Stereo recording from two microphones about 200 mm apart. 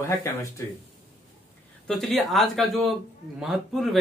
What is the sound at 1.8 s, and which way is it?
Speech, centre (ahead or behind).